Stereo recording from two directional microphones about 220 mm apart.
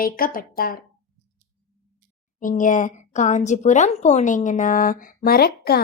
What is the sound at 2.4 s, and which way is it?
A woman's voice, 35° left (ahead or behind).